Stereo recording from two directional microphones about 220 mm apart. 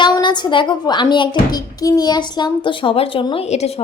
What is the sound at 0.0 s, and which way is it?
A woman's voice, 20° left (ahead or behind).